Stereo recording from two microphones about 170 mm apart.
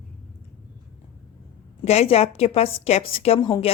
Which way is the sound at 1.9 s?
35° left (ahead or behind).